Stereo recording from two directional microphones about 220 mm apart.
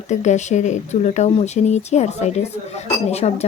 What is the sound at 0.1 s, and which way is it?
Speech, 30° left (ahead or behind).